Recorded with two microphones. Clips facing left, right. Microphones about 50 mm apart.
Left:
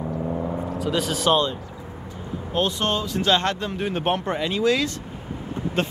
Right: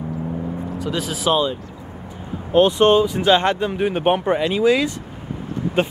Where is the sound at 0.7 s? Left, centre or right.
Centre.